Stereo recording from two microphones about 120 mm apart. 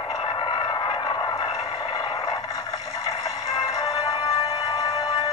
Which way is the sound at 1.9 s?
30° left (ahead or behind).